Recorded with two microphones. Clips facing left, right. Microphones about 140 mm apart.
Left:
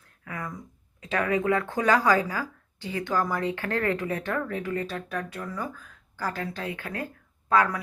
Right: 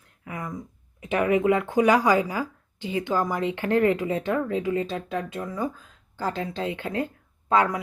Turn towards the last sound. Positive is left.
turn(degrees=-25)  # may be behind; listen again after turning